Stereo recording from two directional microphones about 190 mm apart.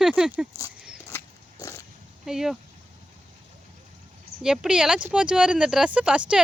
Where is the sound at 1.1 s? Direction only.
15° left (ahead or behind).